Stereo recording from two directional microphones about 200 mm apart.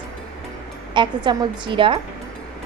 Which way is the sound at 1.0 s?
20° right (ahead or behind).